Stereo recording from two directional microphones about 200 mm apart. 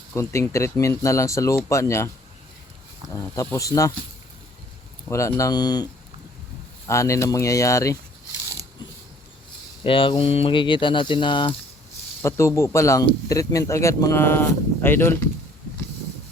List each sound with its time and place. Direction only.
0.1 s speech: 15° left (ahead or behind)
3.1 s speech: 15° left (ahead or behind)
5.0 s speech: 15° left (ahead or behind)
9.8 s speech: 25° left (ahead or behind)